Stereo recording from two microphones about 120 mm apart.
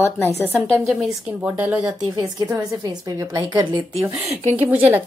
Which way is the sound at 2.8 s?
35° right (ahead or behind).